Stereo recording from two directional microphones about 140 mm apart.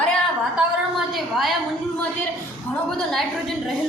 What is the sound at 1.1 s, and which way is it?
Speech, centre (ahead or behind).